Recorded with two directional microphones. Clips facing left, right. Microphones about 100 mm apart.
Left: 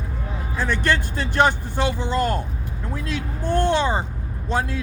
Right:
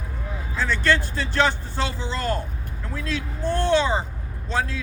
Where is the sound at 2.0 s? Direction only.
55° left (ahead or behind).